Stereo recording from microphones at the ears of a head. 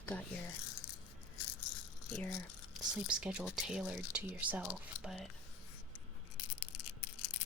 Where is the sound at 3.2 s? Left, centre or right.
Centre.